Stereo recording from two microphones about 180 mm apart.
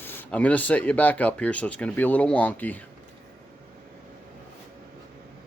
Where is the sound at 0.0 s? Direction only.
10° left (ahead or behind).